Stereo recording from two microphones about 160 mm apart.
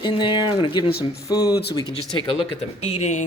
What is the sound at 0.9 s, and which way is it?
Speech, 75° left (ahead or behind).